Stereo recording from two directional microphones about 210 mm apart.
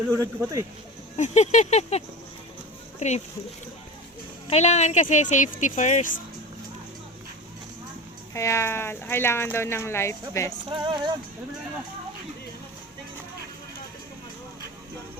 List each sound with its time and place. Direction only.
0.1 s speech: 15° right (ahead or behind)
1.1 s speech: 30° left (ahead or behind)
4.4 s speech: 30° left (ahead or behind)
8.3 s speech: 15° left (ahead or behind)
10.7 s music: 20° right (ahead or behind)